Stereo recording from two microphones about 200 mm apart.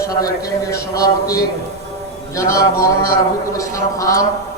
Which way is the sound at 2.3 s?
15° left (ahead or behind).